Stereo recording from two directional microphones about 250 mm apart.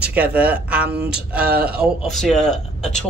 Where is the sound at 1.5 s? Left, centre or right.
Right.